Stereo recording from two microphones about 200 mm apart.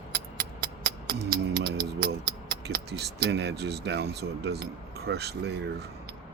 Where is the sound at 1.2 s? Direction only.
55° right (ahead or behind).